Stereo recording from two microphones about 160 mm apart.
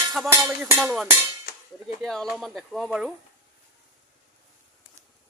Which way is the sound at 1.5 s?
70° left (ahead or behind).